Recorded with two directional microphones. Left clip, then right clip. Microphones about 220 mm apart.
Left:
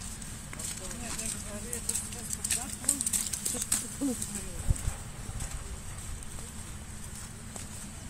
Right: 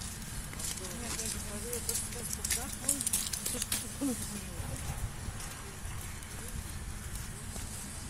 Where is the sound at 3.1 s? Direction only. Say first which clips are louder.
Left 2 dB; 50° left (ahead or behind).